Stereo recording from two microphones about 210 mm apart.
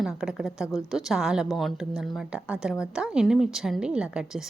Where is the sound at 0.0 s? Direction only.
Centre (ahead or behind).